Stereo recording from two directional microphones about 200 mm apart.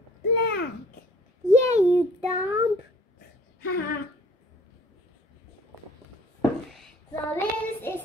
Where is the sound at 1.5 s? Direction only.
35° right (ahead or behind).